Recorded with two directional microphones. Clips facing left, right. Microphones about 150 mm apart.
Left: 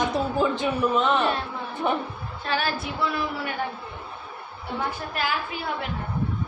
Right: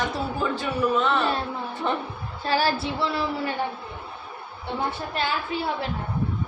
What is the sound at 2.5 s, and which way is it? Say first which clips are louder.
Music: right 4 dB; 35° right (ahead or behind).